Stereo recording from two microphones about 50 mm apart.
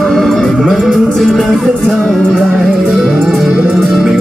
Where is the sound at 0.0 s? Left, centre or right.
Centre.